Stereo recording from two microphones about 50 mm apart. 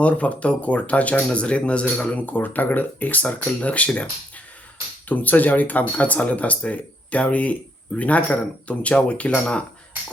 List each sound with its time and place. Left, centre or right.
0.0 s speech: left
5.0 s speech: left